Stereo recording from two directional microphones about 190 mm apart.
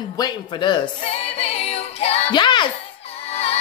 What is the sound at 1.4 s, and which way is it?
Music, 30° left (ahead or behind).